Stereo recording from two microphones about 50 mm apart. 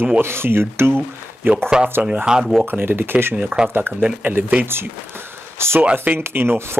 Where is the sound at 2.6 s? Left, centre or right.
Right.